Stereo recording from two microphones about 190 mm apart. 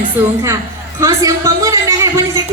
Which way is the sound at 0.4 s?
15° right (ahead or behind).